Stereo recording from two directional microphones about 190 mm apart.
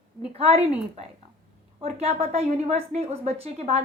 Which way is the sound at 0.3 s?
30° right (ahead or behind).